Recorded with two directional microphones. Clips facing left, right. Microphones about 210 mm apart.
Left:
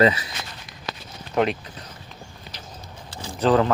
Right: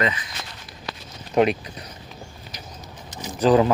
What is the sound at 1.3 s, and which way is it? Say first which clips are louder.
Speech: right 3 dB; 15° right (ahead or behind).